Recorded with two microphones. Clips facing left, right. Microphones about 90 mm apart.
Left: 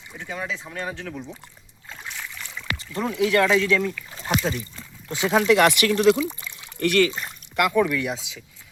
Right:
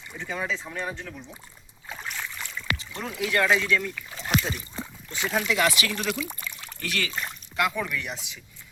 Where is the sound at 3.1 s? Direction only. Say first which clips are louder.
Left 5 dB; 90° left.